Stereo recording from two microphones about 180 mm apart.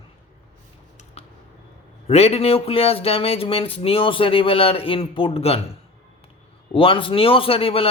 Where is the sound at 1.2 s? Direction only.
35° left (ahead or behind).